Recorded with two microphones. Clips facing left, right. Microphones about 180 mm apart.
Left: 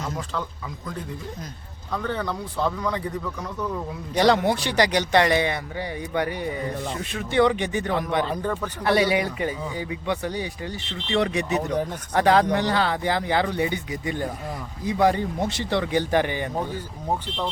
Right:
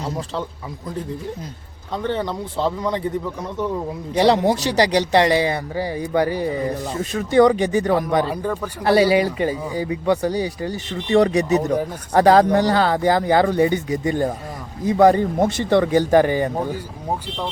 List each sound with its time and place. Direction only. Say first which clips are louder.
1.9 s a man's voice: right 4 dB; 25° right (ahead or behind)
8.3 s speech: right 3 dB; 10° right (ahead or behind)
8.8 s a man's voice: right 6 dB; 30° right (ahead or behind)